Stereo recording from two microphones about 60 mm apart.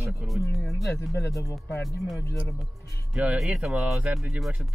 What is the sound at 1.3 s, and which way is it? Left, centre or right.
Speech, left.